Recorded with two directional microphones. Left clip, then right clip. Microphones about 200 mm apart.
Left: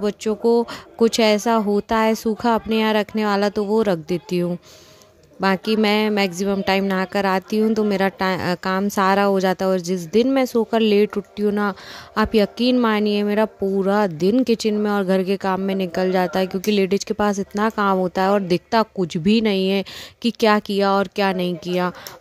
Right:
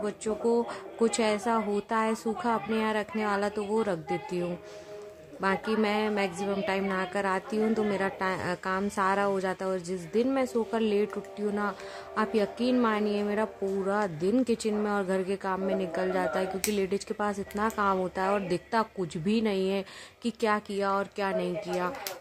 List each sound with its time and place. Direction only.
0.0 s speech: 45° left (ahead or behind)